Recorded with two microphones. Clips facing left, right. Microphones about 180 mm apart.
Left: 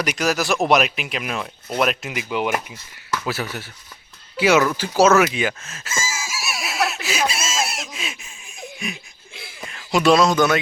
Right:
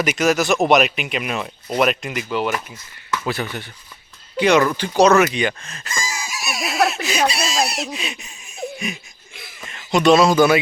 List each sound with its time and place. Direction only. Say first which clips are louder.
0.0 s speech: right 4 dB; centre (ahead or behind)
9.3 s a sound: left 2 dB; 30° left (ahead or behind)
9.6 s speech: right 2 dB; centre (ahead or behind)